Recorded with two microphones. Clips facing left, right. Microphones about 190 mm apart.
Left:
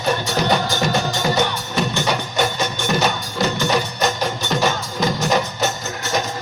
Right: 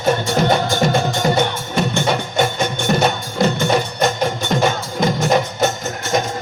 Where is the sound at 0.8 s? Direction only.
50° right (ahead or behind).